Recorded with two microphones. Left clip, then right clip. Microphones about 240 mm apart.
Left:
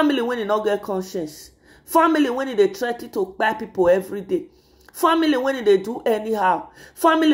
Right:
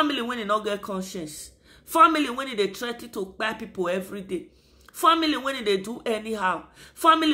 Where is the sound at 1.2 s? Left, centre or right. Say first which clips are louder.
Left 5 dB; centre.